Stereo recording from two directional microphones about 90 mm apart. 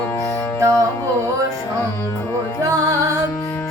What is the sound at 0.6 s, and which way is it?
Music, 35° right (ahead or behind).